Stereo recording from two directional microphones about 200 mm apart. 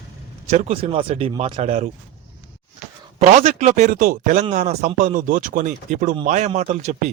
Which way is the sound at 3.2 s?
30° right (ahead or behind).